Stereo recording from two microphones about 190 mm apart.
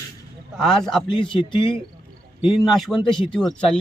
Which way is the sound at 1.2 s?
25° left (ahead or behind).